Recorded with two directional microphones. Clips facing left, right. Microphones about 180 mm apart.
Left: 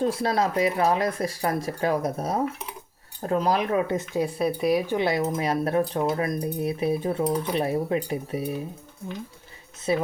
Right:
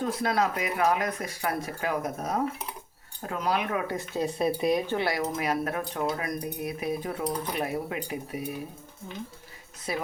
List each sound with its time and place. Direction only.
0.0 s speech: 30° left (ahead or behind)
4.4 s speech: centre (ahead or behind)
4.9 s speech: 20° left (ahead or behind)
9.9 s speech: 25° left (ahead or behind)